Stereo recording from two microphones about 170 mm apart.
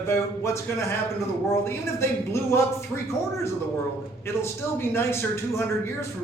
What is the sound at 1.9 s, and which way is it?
Speech, 15° left (ahead or behind).